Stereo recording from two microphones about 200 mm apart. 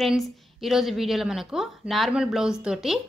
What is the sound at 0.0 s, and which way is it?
A woman's voice, centre (ahead or behind).